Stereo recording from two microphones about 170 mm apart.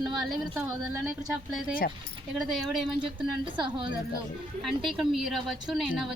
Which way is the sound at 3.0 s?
30° right (ahead or behind).